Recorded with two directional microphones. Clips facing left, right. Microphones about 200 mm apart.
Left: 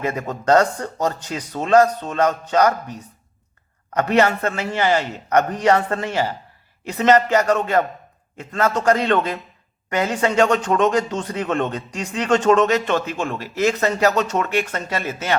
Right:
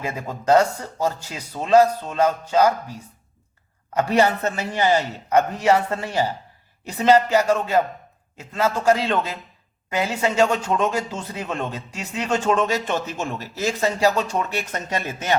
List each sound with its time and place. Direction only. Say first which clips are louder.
0.1 s a man's voice: even; 10° right (ahead or behind)
3.9 s a man's voice: left 1 dB; 10° right (ahead or behind)